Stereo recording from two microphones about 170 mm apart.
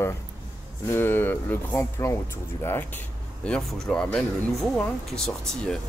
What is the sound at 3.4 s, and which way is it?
Speech, 5° left (ahead or behind).